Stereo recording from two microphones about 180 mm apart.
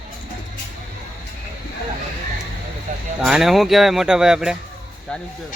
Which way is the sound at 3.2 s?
Centre (ahead or behind).